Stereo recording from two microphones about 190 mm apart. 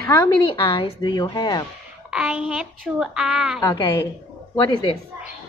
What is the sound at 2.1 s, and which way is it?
A woman's voice, 5° right (ahead or behind).